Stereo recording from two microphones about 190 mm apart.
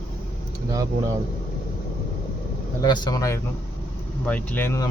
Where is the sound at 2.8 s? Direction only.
20° left (ahead or behind).